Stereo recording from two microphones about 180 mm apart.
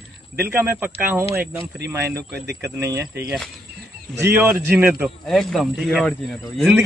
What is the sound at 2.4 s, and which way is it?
Speech, 65° right (ahead or behind).